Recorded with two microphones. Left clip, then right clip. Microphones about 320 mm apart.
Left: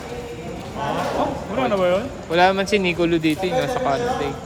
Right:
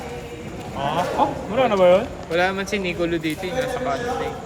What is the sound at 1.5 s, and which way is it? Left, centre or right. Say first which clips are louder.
Speech: right 4 dB; centre.